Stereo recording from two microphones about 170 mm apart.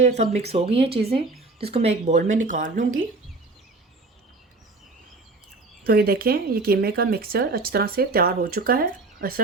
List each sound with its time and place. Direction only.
0.2 s speech: 40° right (ahead or behind)
5.8 s speech: 65° right (ahead or behind)